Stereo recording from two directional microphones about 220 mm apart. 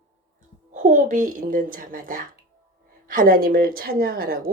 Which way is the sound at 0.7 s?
35° right (ahead or behind).